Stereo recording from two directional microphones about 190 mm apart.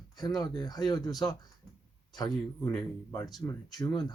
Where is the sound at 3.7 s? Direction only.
20° left (ahead or behind).